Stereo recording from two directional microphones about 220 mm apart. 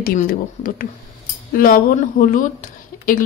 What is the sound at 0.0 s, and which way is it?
Speech, 40° left (ahead or behind).